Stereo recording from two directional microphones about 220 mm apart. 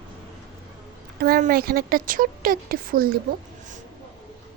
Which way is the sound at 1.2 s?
40° right (ahead or behind).